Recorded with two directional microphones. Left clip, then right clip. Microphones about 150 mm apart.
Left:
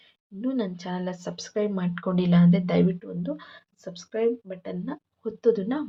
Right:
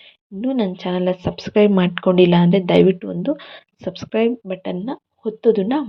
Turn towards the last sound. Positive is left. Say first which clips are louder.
# right 7 dB
turn(degrees=-20)  # may be behind; listen again after turning